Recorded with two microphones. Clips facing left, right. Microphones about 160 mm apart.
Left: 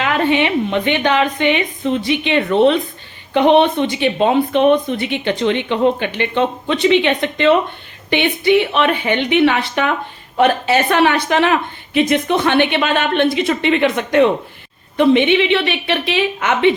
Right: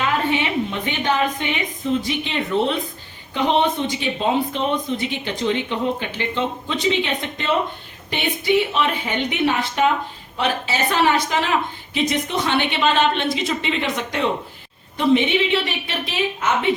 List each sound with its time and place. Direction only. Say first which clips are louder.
0.0 s a woman's voice: left 5 dB; 75° left (ahead or behind)
10.3 s a woman's voice: left 9 dB; 55° left (ahead or behind); by 16.7 s 70° left (ahead or behind)